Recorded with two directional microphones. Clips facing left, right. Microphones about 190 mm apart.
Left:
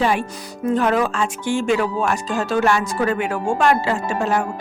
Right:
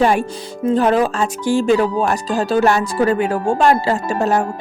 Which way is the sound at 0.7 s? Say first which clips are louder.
Right 3 dB; 35° right (ahead or behind).